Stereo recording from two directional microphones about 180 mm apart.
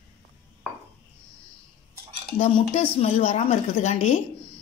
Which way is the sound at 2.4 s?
35° left (ahead or behind).